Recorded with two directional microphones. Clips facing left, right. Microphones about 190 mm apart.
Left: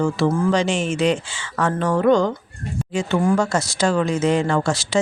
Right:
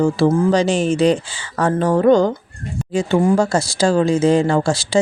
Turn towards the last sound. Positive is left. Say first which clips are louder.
# right 3 dB
turn(degrees=-30)  # may be behind; listen again after turning